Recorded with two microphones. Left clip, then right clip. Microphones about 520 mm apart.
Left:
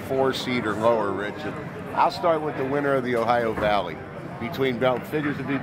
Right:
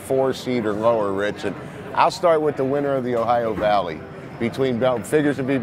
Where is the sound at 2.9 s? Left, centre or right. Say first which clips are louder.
Left 1 dB; right.